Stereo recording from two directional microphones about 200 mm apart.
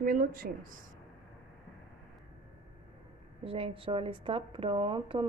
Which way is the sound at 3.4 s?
25° right (ahead or behind).